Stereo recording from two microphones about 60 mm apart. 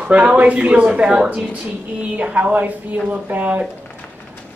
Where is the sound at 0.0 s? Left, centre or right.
Right.